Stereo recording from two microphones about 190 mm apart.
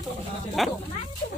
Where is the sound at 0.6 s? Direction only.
Centre (ahead or behind).